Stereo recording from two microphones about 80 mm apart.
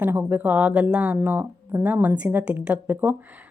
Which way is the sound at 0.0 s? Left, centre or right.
Right.